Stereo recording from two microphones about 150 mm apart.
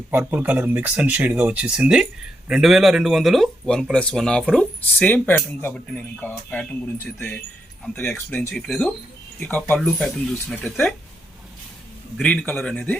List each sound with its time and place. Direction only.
0.1 s speech: 10° right (ahead or behind); by 8.9 s 5° left (ahead or behind)
9.4 s speech: 15° left (ahead or behind)
9.7 s speech: centre (ahead or behind)
12.1 s speech: 5° left (ahead or behind)